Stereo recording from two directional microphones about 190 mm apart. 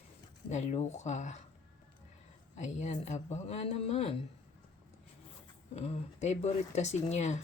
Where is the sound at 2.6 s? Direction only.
40° left (ahead or behind).